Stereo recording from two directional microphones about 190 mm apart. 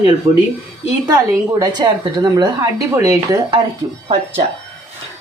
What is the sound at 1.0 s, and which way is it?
A woman's voice, 20° right (ahead or behind).